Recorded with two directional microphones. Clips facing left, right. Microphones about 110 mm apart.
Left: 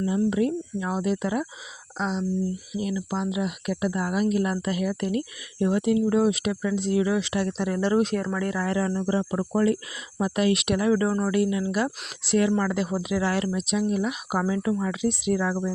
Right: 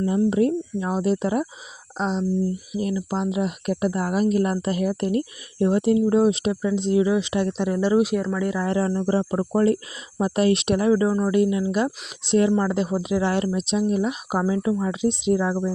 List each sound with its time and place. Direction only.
0.3 s speech: 35° right (ahead or behind); by 8.6 s 15° right (ahead or behind)
8.6 s speech: 30° right (ahead or behind)